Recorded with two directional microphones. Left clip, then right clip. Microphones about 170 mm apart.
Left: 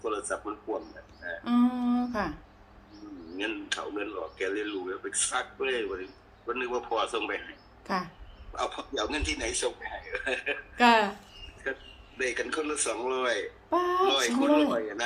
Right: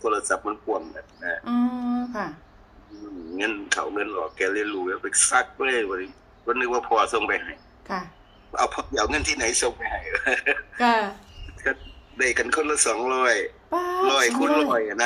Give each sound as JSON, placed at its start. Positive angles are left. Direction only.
{"t": 0.0, "sound": "speech", "side_deg": -65}
{"t": 1.0, "sound": "music", "side_deg": -75}
{"t": 1.5, "sound": "humming", "side_deg": 0}
{"t": 3.3, "sound": "speech", "side_deg": -65}
{"t": 7.9, "sound": "speech", "side_deg": 5}
{"t": 8.5, "sound": "speech", "side_deg": -65}
{"t": 10.8, "sound": "speech", "side_deg": 5}
{"t": 11.6, "sound": "a man's voice", "side_deg": -65}
{"t": 13.7, "sound": "speech", "side_deg": 0}
{"t": 14.1, "sound": "speech", "side_deg": -70}